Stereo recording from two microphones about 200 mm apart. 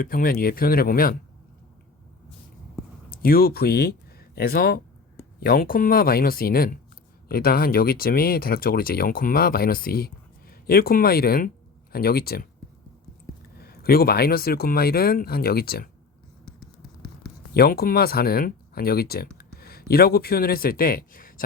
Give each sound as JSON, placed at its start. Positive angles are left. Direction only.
{"t": 0.0, "sound": "speech", "side_deg": 45}
{"t": 3.1, "sound": "speech", "side_deg": 50}
{"t": 13.6, "sound": "speech", "side_deg": 50}
{"t": 17.5, "sound": "speech", "side_deg": 50}